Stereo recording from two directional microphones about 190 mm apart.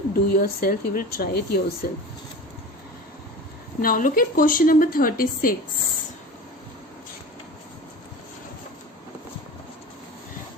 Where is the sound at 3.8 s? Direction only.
45° left (ahead or behind).